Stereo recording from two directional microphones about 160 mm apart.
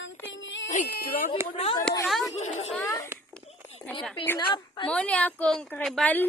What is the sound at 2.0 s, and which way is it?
Speech, centre (ahead or behind).